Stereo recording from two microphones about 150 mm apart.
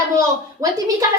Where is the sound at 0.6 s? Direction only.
25° right (ahead or behind).